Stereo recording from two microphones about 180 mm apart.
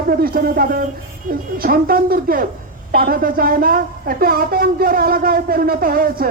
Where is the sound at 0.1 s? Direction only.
55° right (ahead or behind).